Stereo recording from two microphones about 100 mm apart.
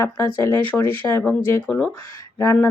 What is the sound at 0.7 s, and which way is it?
Speech, 20° left (ahead or behind).